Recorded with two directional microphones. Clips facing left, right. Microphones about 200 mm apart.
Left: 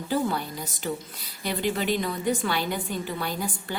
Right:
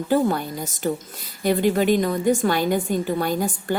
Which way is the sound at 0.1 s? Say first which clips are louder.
Right 6 dB; 50° right (ahead or behind).